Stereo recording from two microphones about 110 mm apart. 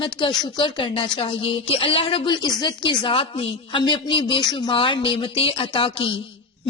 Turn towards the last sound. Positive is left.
turn(degrees=55)  # may be behind; listen again after turning